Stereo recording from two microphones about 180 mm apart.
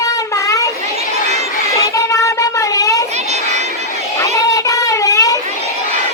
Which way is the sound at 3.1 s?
40° right (ahead or behind).